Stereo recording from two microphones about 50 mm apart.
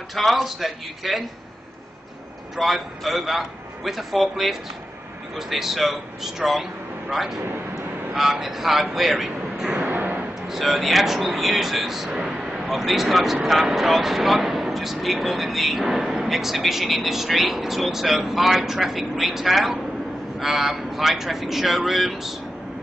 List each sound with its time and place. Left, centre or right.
0.1 s speech: centre
2.5 s speech: centre
12.2 s a sound: centre
12.6 s speech: centre